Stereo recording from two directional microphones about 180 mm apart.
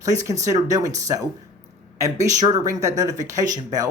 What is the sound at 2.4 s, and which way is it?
Speech, 20° right (ahead or behind).